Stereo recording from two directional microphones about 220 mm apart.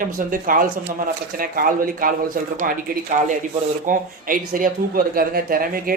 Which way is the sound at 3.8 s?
40° right (ahead or behind).